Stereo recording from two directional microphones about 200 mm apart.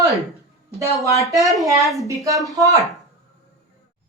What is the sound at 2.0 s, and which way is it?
Speech, 15° right (ahead or behind).